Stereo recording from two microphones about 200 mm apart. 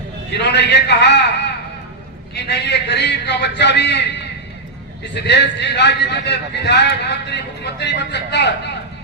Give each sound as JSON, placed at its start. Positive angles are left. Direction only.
{"t": 0.3, "sound": "a man's voice", "side_deg": 60}